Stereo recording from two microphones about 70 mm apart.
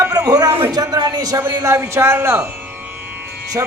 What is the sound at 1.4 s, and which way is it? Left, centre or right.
A woman's voice, right.